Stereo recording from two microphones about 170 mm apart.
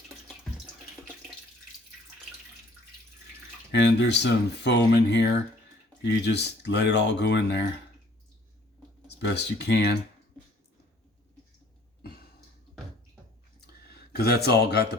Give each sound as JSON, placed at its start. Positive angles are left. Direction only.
{"t": 3.7, "sound": "speech", "side_deg": 90}
{"t": 9.0, "sound": "speech", "side_deg": 80}
{"t": 14.1, "sound": "speech", "side_deg": 70}